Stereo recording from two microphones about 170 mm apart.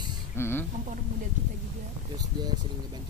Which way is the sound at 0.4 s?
15° left (ahead or behind).